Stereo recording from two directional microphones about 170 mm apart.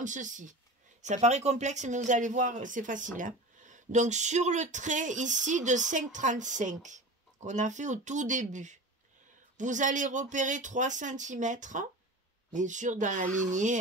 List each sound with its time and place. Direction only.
0.0 s speech: 50° right (ahead or behind)